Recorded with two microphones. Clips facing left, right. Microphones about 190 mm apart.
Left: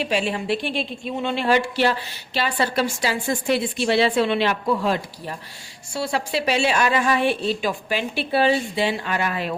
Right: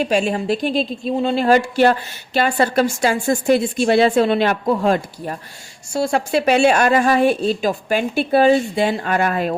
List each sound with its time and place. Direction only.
0.0 s speech: 45° right (ahead or behind)